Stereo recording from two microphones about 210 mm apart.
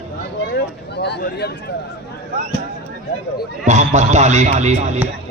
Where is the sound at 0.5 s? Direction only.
50° left (ahead or behind).